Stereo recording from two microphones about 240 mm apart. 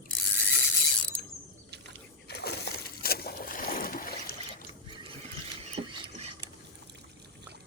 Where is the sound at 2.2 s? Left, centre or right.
Left.